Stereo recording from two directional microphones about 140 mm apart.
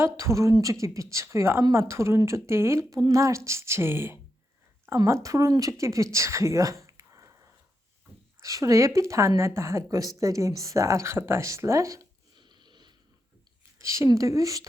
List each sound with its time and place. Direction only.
0.0 s a woman's voice: 20° right (ahead or behind)
13.7 s speech: 20° right (ahead or behind)